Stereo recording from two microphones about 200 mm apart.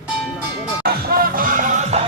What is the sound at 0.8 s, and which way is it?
Music, 50° right (ahead or behind).